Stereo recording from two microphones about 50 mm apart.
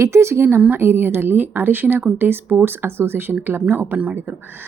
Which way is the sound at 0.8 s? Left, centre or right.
Right.